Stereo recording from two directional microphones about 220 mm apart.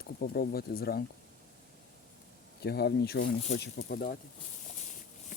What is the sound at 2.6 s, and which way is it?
Speech, 50° left (ahead or behind).